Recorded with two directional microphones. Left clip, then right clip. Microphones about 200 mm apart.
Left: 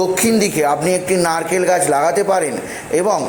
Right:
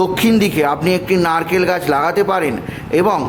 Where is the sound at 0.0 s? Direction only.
45° right (ahead or behind).